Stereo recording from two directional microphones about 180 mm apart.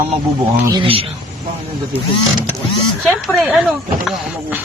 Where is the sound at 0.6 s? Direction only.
25° right (ahead or behind).